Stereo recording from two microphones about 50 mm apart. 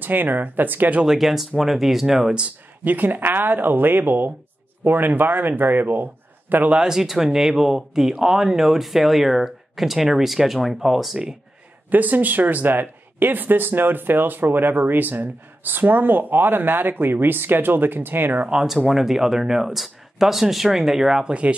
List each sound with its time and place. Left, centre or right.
0.0 s speech: right
1.0 s speech: centre
2.4 s speech: right
6.7 s speech: centre
11.9 s speech: right
18.9 s speech: centre
21.3 s speech: right